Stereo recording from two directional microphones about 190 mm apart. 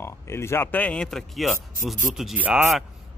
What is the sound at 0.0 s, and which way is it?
Speech, 15° left (ahead or behind).